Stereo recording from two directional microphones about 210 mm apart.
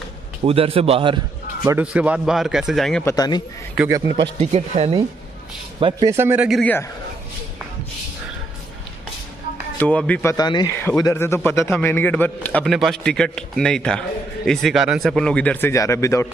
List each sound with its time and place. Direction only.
0.5 s a man's voice: 25° right (ahead or behind)
1.8 s speech: 5° right (ahead or behind)
3.1 s speech: 20° left (ahead or behind)
3.7 s a man's voice: 10° right (ahead or behind)
4.4 s a man's voice: 30° right (ahead or behind); by 6.6 s 5° right (ahead or behind)
6.6 s a man's voice: 10° left (ahead or behind)
9.8 s a man's voice: 5° left (ahead or behind)
10.3 s a man's voice: 20° left (ahead or behind)